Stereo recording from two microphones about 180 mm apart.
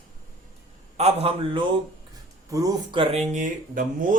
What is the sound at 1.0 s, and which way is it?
Speech, 35° right (ahead or behind).